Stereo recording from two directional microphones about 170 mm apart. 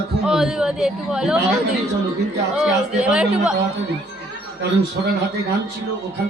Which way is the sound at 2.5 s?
5° right (ahead or behind).